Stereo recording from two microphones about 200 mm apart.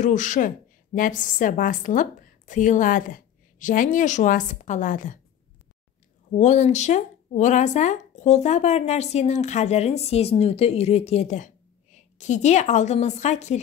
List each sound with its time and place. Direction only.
0.0 s speech: 40° left (ahead or behind)
6.3 s speech: 35° left (ahead or behind)